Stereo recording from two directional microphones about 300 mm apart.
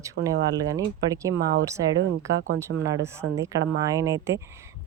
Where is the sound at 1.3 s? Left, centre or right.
Right.